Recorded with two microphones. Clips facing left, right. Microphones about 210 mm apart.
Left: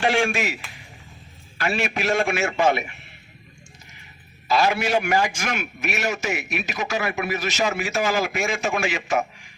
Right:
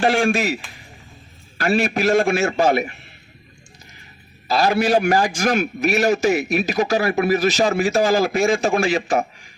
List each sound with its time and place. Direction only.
0.0 s a man's voice: 35° right (ahead or behind)
4.4 s a man's voice: 35° right (ahead or behind)